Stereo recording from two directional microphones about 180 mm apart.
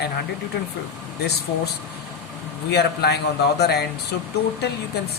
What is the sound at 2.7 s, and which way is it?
Speech, 65° left (ahead or behind).